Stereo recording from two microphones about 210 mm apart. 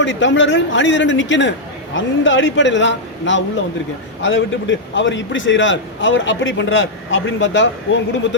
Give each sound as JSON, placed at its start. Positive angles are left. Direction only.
{"t": 0.0, "sound": "a man's voice", "side_deg": 60}